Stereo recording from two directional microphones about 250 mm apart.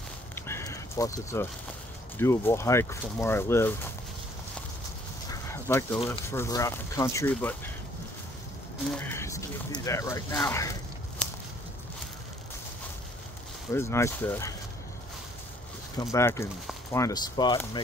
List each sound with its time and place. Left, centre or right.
0.5 s a sound: centre
2.1 s speech: centre
5.3 s a sound: centre
6.0 s speech: centre
8.9 s speech: centre
13.7 s speech: centre
16.0 s speech: centre